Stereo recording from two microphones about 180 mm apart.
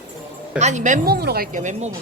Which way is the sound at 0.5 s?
40° right (ahead or behind).